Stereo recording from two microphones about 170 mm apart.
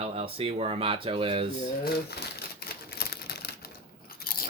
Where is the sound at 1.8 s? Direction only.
70° left (ahead or behind).